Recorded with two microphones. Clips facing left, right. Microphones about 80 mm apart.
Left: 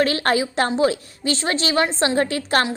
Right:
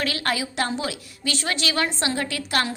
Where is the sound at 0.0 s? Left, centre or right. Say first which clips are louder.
Left 7 dB; left.